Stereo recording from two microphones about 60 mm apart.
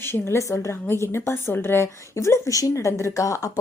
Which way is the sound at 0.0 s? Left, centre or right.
Left.